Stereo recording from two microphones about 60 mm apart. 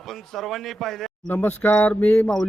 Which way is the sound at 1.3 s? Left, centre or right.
Left.